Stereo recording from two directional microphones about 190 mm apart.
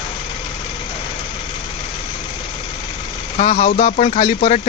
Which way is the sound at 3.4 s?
35° left (ahead or behind).